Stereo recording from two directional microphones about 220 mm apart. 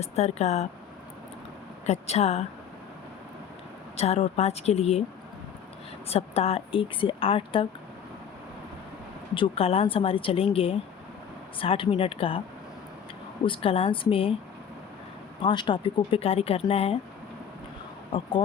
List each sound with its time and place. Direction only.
0.0 s speech: 30° left (ahead or behind)
1.9 s speech: 30° left (ahead or behind)
3.9 s speech: 25° left (ahead or behind)
6.1 s speech: 25° left (ahead or behind)
9.3 s speech: 25° left (ahead or behind)
13.4 s speech: 25° left (ahead or behind)
15.4 s speech: 20° left (ahead or behind)
18.1 s speech: 20° left (ahead or behind)